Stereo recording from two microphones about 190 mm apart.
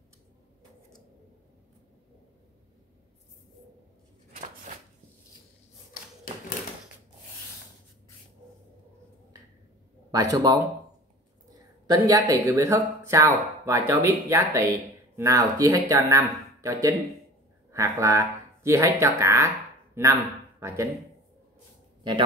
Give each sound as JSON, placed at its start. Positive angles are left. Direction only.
{"t": 4.7, "sound": "a sound", "side_deg": -40}
{"t": 10.1, "sound": "speech", "side_deg": -20}
{"t": 11.9, "sound": "speech", "side_deg": -20}